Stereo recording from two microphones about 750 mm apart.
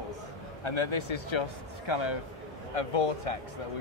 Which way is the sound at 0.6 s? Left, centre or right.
Left.